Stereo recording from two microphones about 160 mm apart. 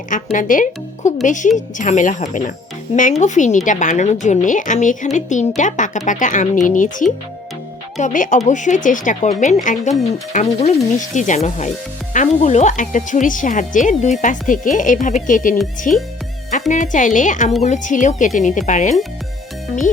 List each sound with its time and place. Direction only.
0.1 s speech: 55° left (ahead or behind)
10.3 s a sound: 40° left (ahead or behind)
10.9 s speech: 50° left (ahead or behind)